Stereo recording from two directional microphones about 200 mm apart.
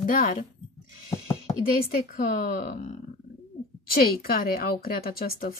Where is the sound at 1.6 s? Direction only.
45° left (ahead or behind).